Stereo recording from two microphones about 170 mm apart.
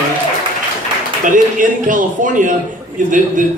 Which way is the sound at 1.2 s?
50° right (ahead or behind).